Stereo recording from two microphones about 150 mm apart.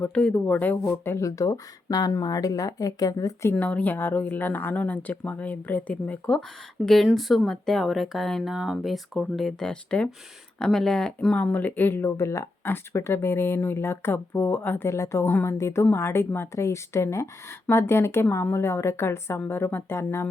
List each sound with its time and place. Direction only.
0.0 s speech: 5° left (ahead or behind)
3.5 s speech: 10° left (ahead or behind)